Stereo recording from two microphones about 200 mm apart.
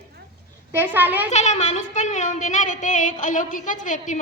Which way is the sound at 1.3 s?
35° left (ahead or behind).